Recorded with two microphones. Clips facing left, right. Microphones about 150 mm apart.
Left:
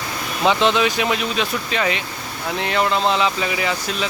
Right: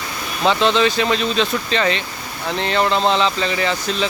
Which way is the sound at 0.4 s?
15° left (ahead or behind).